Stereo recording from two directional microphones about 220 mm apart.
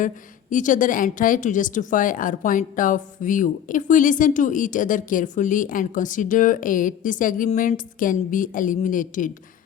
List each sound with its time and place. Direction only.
0.5 s a woman's voice: 35° left (ahead or behind)